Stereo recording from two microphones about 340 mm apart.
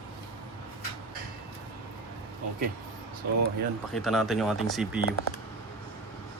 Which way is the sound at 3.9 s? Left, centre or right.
Centre.